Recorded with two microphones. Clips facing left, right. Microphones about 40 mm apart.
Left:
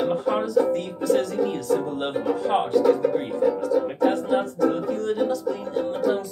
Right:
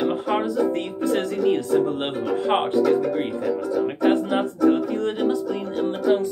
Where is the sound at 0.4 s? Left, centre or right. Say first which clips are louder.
Left 1 dB; right.